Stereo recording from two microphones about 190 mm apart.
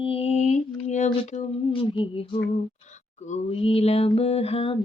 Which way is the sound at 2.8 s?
40° left (ahead or behind).